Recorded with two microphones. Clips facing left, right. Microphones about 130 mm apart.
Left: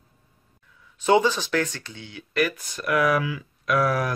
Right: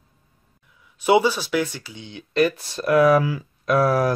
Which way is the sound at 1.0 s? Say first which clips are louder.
Right 2 dB; 10° right (ahead or behind).